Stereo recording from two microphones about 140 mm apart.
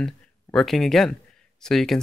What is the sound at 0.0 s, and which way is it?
Speech, 5° left (ahead or behind).